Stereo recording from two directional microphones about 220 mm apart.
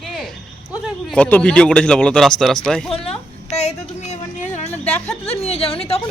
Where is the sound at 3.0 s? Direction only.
30° left (ahead or behind).